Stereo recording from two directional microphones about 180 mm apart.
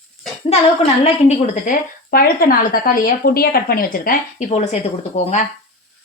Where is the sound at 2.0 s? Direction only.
55° left (ahead or behind); by 5.4 s 40° left (ahead or behind).